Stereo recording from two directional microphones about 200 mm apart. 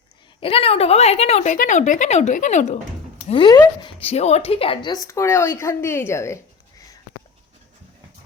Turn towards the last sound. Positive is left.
turn(degrees=15)  # may be behind; listen again after turning